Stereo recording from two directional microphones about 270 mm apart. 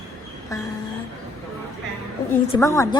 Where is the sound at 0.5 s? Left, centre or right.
Centre.